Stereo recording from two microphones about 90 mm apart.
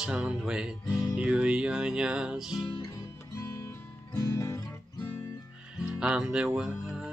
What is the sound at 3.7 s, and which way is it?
Music, 40° left (ahead or behind).